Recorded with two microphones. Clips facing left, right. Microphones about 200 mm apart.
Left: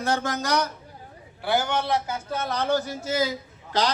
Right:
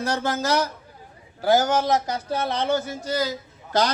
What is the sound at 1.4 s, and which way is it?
Speech, 40° right (ahead or behind).